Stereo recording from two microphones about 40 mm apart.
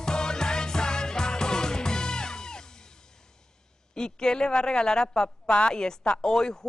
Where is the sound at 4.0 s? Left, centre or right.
Centre.